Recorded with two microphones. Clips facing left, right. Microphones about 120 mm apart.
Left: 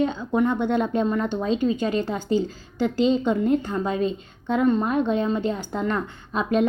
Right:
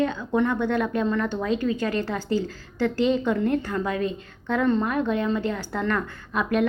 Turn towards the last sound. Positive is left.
turn(degrees=25)  # may be behind; listen again after turning